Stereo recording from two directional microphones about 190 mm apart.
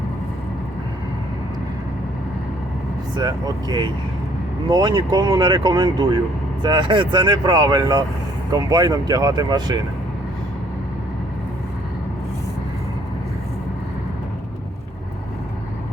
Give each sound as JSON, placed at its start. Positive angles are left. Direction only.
{"t": 3.2, "sound": "speech", "side_deg": -20}